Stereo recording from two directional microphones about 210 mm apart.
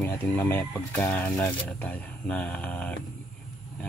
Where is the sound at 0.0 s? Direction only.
10° left (ahead or behind).